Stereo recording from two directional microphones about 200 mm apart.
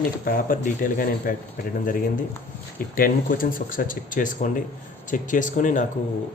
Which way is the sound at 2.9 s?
45° left (ahead or behind).